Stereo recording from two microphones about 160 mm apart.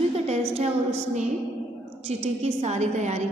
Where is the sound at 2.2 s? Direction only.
40° right (ahead or behind).